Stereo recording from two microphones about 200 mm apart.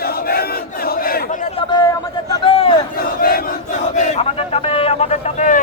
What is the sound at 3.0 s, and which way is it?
Crowd, 45° left (ahead or behind).